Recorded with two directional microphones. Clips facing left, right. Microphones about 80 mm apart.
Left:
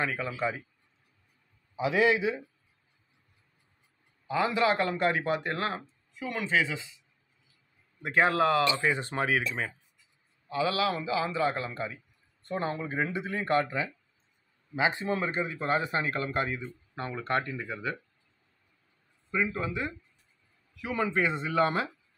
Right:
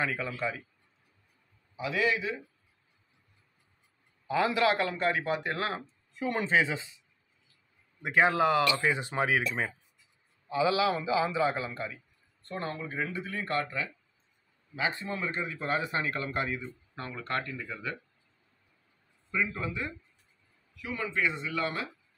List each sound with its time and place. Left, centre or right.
0.0 s speech: centre
1.8 s speech: centre
4.3 s speech: centre
5.8 s a sound: centre
8.0 s a man's voice: centre
8.6 s speech: left
8.9 s a man's voice: centre
10.5 s a man's voice: centre
12.4 s speech: centre
15.3 s speech: centre
17.1 s speech: centre
19.3 s speech: centre
20.8 s speech: left